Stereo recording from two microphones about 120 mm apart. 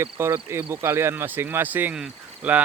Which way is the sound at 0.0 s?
20° right (ahead or behind).